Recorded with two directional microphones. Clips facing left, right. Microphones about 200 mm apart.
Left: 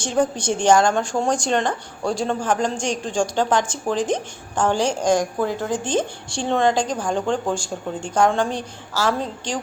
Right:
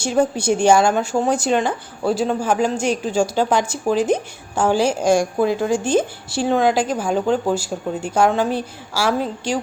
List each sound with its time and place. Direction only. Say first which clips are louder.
0.0 s speech: right 3 dB; 10° right (ahead or behind)